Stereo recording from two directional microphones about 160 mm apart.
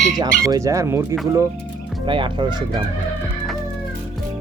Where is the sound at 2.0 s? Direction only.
30° right (ahead or behind).